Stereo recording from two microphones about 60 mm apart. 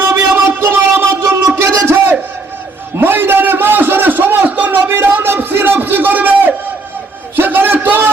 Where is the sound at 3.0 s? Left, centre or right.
Right.